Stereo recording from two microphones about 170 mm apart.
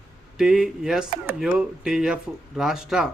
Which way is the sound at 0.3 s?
Centre (ahead or behind).